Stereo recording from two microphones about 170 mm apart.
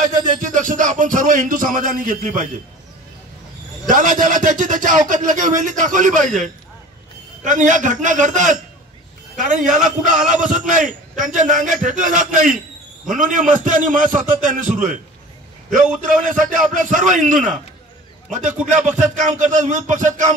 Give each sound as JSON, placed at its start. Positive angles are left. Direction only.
{"t": 0.0, "sound": "speech", "side_deg": -50}
{"t": 3.9, "sound": "speech", "side_deg": -50}
{"t": 7.4, "sound": "speech", "side_deg": -50}
{"t": 19.2, "sound": "speech", "side_deg": -50}